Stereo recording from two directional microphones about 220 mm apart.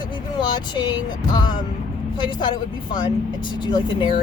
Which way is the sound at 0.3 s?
20° left (ahead or behind).